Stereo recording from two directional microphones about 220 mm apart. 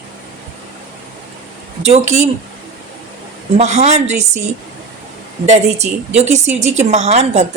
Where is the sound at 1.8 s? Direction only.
30° right (ahead or behind).